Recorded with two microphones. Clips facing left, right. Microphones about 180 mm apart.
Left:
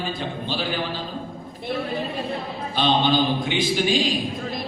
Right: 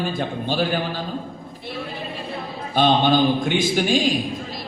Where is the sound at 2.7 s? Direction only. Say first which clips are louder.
Right 3 dB; 50° right (ahead or behind).